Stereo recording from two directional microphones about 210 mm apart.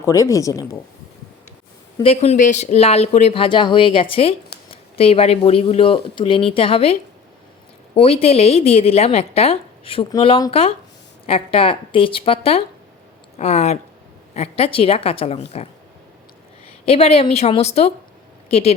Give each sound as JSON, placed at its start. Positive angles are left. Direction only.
{"t": 0.0, "sound": "speech", "side_deg": 15}
{"t": 2.0, "sound": "a woman's voice", "side_deg": 30}
{"t": 7.9, "sound": "a woman's voice", "side_deg": 30}
{"t": 16.8, "sound": "a woman's voice", "side_deg": 30}